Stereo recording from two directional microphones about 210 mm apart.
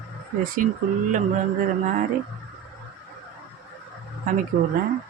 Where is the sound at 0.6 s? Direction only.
40° right (ahead or behind).